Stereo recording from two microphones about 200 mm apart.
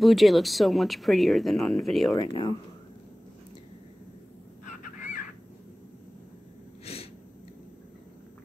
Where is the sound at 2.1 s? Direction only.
25° left (ahead or behind).